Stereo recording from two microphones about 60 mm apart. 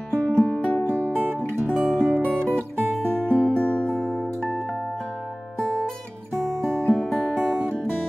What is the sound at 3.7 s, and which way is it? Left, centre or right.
Music, centre.